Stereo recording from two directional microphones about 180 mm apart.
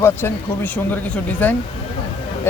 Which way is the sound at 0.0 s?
15° left (ahead or behind).